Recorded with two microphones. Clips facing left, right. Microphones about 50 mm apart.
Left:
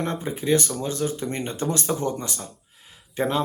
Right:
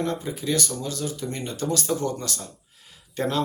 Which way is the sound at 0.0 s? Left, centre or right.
Left.